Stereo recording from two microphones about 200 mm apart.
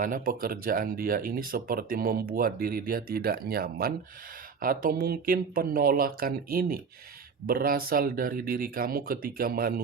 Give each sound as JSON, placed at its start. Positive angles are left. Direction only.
{"t": 0.0, "sound": "speech", "side_deg": -45}